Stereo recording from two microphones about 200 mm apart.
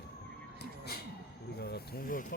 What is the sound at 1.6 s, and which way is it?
Speech, 50° left (ahead or behind).